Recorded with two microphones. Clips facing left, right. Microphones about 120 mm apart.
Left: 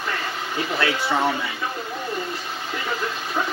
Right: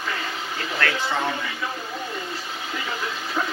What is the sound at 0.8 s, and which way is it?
Speech, 15° left (ahead or behind).